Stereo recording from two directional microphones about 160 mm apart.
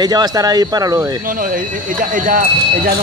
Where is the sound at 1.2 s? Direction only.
60° right (ahead or behind).